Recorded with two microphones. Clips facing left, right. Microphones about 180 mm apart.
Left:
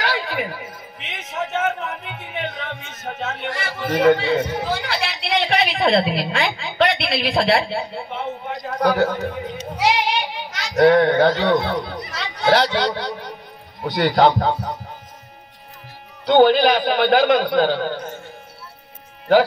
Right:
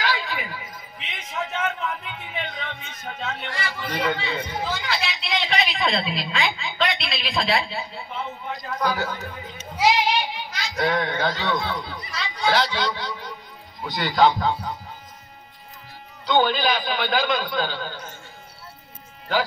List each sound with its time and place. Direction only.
0.0 s music: 60° left (ahead or behind)
8.8 s a sound: 55° left (ahead or behind)
10.8 s a man's voice: 60° left (ahead or behind)
16.3 s a man's voice: 55° left (ahead or behind)